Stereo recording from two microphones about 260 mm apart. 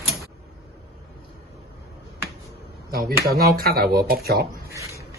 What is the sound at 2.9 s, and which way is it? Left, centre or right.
Speech, right.